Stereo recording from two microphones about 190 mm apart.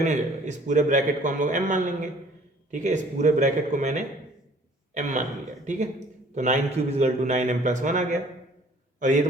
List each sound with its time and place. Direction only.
0.0 s a man's voice: 40° right (ahead or behind)
6.3 s a man's voice: 40° right (ahead or behind)